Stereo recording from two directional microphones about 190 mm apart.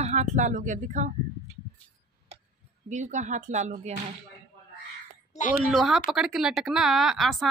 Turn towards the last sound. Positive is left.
turn(degrees=0)  # may be behind; listen again after turning